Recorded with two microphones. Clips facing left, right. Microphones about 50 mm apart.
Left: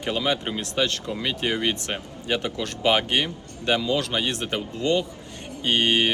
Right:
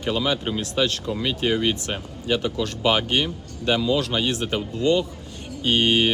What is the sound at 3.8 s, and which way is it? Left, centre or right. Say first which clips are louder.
Speech: right 2 dB; left.